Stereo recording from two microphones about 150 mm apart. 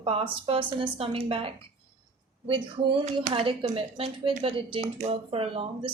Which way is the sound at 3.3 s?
40° right (ahead or behind).